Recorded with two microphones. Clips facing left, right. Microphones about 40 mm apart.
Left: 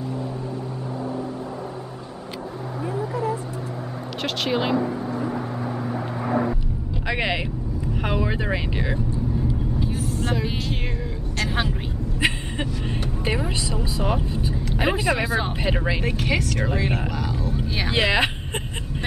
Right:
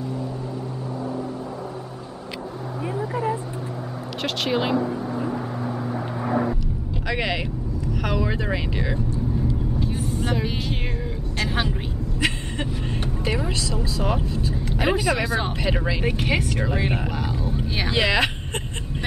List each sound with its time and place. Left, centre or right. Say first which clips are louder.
4.2 s speech: even; centre
5.3 s vehicle: even; centre
7.1 s vehicle: left 1 dB; centre
8.0 s speech: even; centre
9.8 s vehicle: even; centre
13.2 s speech: even; centre
14.3 s vehicle: even; centre
15.0 s speech: even; centre
16.0 s speech: right 1 dB; centre
17.2 s a sound: even; centre
17.8 s speech: even; centre